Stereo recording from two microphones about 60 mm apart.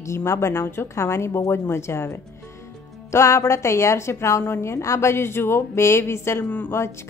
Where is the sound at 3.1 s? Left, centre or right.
Left.